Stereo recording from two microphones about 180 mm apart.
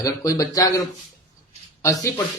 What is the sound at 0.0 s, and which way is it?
Speech, 20° left (ahead or behind).